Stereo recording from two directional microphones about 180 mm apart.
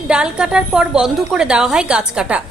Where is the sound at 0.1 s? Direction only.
5° right (ahead or behind).